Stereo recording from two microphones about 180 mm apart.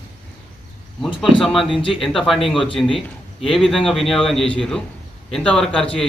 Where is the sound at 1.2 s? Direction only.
Centre (ahead or behind).